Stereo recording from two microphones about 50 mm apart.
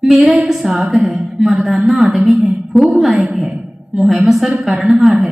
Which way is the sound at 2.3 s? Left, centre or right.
Right.